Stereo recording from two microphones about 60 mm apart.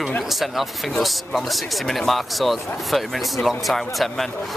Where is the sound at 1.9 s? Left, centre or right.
Centre.